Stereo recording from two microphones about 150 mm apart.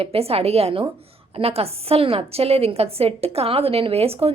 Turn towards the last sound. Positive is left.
turn(degrees=-40)  # may be behind; listen again after turning